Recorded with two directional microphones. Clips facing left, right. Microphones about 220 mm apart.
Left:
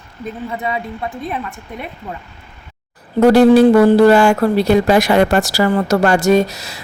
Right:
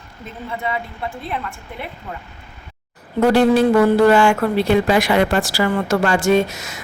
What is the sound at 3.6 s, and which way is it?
Speech, 35° left (ahead or behind).